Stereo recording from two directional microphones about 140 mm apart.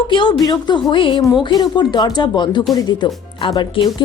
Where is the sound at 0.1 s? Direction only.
35° left (ahead or behind).